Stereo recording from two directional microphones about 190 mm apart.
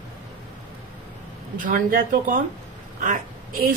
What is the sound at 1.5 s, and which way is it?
A woman's voice, 45° right (ahead or behind).